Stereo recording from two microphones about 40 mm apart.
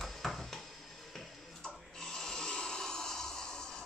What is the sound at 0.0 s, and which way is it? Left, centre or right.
Bouncing, centre.